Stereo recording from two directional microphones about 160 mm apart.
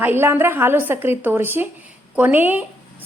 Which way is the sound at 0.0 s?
15° right (ahead or behind).